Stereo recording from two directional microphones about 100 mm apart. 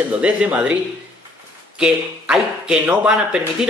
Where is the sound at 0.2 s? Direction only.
15° right (ahead or behind).